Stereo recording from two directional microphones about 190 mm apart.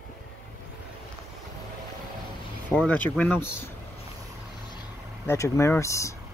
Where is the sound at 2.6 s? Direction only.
10° left (ahead or behind).